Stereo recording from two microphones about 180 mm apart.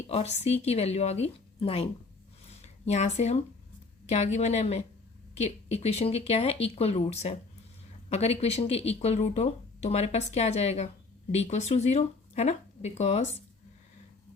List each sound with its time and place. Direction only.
0.1 s speech: 35° left (ahead or behind)